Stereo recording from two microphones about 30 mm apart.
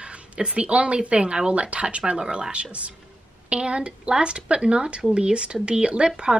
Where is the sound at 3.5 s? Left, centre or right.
Right.